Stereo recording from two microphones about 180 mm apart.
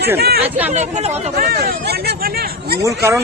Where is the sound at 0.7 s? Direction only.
40° right (ahead or behind).